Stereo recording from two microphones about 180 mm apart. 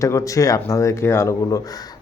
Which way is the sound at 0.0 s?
15° left (ahead or behind).